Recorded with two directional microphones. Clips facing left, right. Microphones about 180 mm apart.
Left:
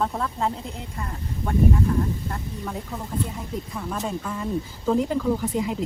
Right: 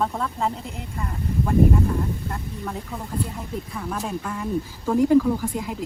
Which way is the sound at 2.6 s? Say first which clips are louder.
Even; centre (ahead or behind).